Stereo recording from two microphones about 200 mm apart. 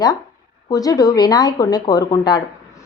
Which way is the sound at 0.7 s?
20° left (ahead or behind).